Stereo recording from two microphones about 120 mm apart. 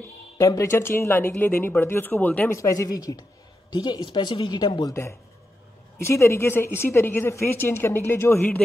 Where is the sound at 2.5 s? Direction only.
25° left (ahead or behind).